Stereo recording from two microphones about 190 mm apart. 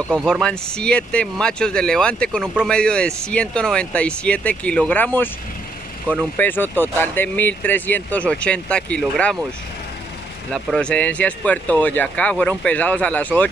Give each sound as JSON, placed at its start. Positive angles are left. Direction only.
{"t": 0.1, "sound": "speech", "side_deg": 0}
{"t": 6.3, "sound": "speech", "side_deg": 10}
{"t": 10.5, "sound": "speech", "side_deg": 5}